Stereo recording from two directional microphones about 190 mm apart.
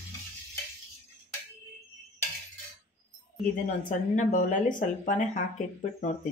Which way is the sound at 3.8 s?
45° left (ahead or behind).